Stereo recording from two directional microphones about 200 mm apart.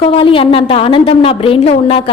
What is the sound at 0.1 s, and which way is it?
A woman's voice, 25° left (ahead or behind).